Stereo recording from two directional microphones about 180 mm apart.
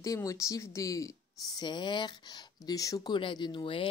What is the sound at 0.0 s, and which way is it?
Speech, 20° left (ahead or behind).